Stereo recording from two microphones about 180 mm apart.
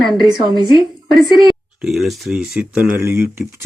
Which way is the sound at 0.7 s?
Centre (ahead or behind).